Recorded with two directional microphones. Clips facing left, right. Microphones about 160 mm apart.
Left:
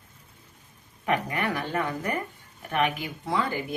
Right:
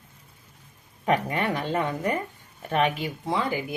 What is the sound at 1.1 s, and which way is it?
Speech, 25° right (ahead or behind).